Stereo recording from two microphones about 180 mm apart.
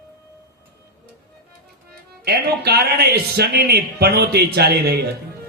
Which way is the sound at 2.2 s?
60° right (ahead or behind).